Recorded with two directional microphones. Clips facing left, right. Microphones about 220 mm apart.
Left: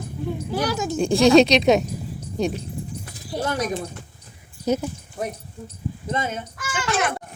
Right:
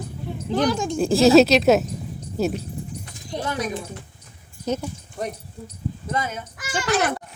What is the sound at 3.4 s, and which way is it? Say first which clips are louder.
Speech: left 2 dB; 40° left (ahead or behind).